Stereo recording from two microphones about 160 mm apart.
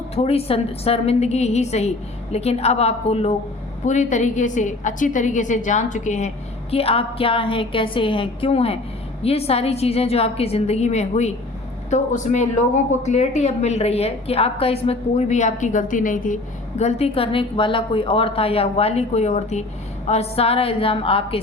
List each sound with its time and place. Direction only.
0.2 s a woman's voice: 40° left (ahead or behind)